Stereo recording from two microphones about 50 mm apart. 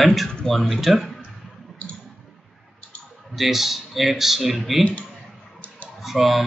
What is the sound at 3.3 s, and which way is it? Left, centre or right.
Speech, centre.